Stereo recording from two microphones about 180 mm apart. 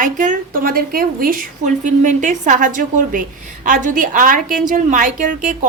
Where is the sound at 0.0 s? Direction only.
45° right (ahead or behind).